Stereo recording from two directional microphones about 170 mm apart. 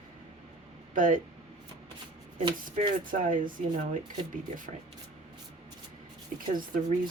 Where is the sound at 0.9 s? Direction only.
50° right (ahead or behind).